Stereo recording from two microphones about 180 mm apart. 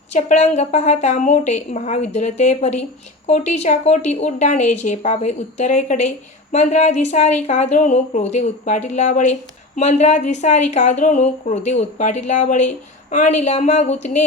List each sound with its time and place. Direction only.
0.1 s a woman's voice: 40° left (ahead or behind)